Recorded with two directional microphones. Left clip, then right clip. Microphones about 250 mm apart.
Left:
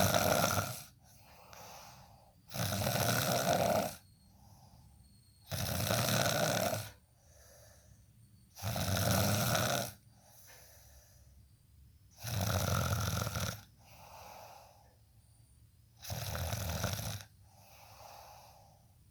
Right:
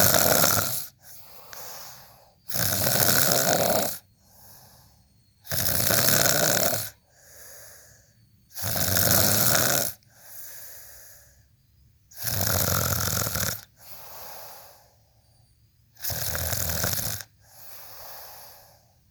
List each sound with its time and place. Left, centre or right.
0.0 s snoring: right
16.0 s snoring: right